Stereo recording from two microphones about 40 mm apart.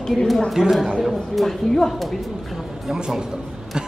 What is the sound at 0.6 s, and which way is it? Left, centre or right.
Speech, centre.